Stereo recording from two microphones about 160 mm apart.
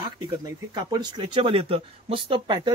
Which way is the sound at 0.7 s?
25° right (ahead or behind).